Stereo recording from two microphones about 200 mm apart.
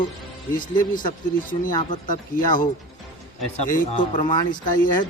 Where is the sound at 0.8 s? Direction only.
40° left (ahead or behind).